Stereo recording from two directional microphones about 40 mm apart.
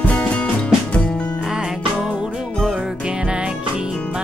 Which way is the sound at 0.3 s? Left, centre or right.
Left.